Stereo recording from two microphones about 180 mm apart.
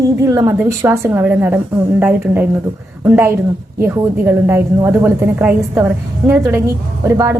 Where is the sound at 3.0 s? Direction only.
10° right (ahead or behind).